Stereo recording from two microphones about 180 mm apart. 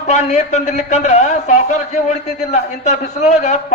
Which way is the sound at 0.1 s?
40° left (ahead or behind).